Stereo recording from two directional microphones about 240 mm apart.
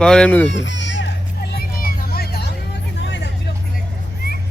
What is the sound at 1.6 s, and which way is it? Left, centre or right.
Vehicle, left.